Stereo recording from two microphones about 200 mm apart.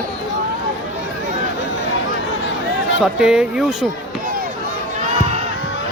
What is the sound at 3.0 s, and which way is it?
Speech, 5° right (ahead or behind).